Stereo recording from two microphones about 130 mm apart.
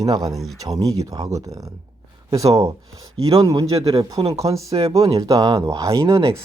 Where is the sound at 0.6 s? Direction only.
25° right (ahead or behind).